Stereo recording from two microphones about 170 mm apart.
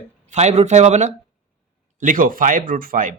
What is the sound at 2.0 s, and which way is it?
Speech, 55° right (ahead or behind).